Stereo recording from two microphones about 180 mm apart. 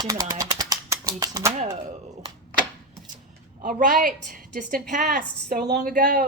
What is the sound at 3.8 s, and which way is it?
A woman's voice, 50° right (ahead or behind).